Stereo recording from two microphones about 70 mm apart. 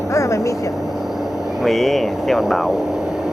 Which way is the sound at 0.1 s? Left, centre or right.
Left.